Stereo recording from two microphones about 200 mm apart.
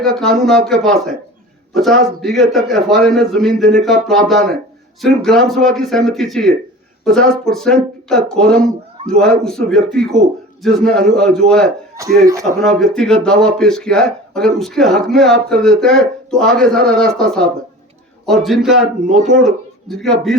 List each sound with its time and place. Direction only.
0.0 s speech: centre (ahead or behind)
12.0 s speech: 15° right (ahead or behind)
12.5 s a man's voice: centre (ahead or behind)